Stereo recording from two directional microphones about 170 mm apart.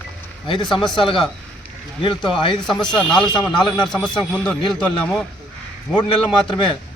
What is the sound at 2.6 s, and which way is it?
A man's voice, 5° left (ahead or behind).